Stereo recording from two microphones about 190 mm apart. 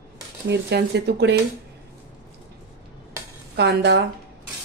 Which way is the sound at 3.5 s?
65° right (ahead or behind).